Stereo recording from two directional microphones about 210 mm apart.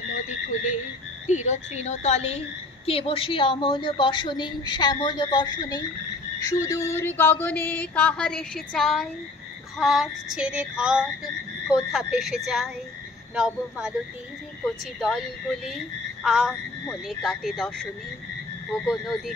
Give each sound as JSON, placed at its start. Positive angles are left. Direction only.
{"t": 1.2, "sound": "a woman's voice", "side_deg": 35}
{"t": 6.4, "sound": "a sound", "side_deg": 15}
{"t": 9.8, "sound": "speech", "side_deg": 0}
{"t": 15.0, "sound": "speech", "side_deg": 0}
{"t": 18.9, "sound": "speech", "side_deg": 0}